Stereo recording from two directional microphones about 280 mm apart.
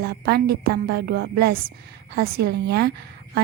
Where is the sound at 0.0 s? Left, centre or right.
Right.